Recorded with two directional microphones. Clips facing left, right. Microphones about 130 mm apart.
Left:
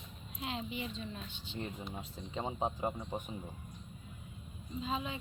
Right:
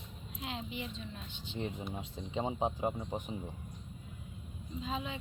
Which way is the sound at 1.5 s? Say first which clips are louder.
Right 3 dB; 15° right (ahead or behind).